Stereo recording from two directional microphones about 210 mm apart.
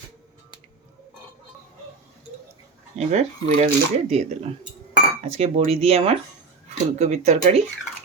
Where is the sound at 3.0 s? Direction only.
35° right (ahead or behind).